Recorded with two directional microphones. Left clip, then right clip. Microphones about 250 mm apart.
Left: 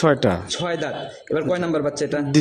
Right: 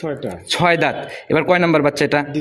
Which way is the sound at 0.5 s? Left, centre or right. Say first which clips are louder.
Right 9 dB; right.